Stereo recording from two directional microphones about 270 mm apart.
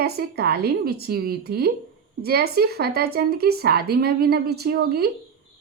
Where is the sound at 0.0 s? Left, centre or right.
Right.